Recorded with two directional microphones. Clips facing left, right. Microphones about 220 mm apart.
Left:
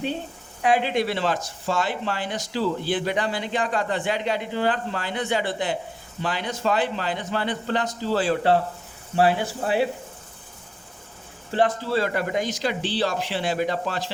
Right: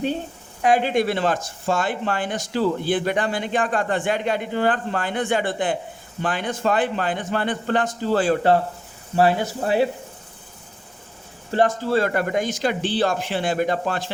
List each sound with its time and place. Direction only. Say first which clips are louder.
0.6 s speech: right 3 dB; 45° right (ahead or behind)
11.5 s speech: right 3 dB; 45° right (ahead or behind)